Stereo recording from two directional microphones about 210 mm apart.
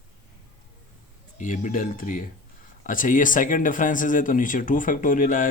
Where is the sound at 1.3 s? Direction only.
35° left (ahead or behind).